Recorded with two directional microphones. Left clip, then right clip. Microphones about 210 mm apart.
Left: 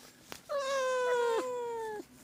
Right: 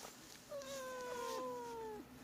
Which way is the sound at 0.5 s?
50° left (ahead or behind).